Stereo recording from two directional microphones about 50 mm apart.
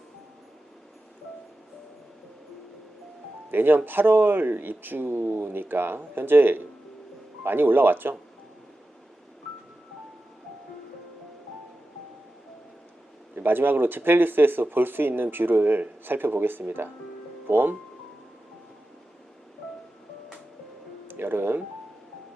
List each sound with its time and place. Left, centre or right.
3.5 s speech: right
13.3 s speech: right
21.1 s speech: right